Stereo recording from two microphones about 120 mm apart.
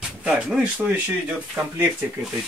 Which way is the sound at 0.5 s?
10° right (ahead or behind).